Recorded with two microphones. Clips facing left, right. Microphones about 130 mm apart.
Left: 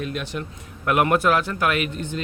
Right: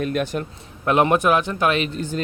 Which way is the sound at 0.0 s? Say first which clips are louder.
Right 6 dB; 50° right (ahead or behind).